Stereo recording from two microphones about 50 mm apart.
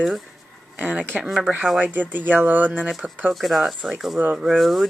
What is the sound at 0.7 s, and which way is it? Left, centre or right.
Speech, right.